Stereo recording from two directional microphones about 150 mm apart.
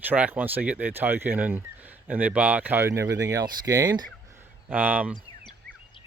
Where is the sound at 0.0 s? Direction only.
10° right (ahead or behind).